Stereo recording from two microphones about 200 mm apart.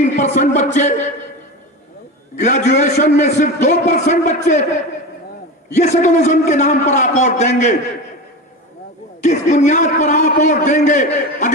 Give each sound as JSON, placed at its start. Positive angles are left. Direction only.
{"t": 0.2, "sound": "a man's voice", "side_deg": 40}
{"t": 2.4, "sound": "a man's voice", "side_deg": 35}
{"t": 5.7, "sound": "a man's voice", "side_deg": 35}
{"t": 9.2, "sound": "a man's voice", "side_deg": 35}